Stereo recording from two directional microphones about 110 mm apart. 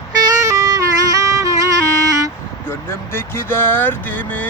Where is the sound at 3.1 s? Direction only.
20° left (ahead or behind).